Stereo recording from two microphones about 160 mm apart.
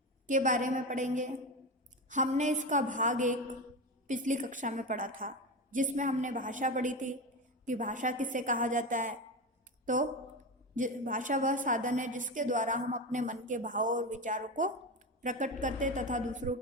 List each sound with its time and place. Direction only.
0.3 s a woman's voice: 55° right (ahead or behind)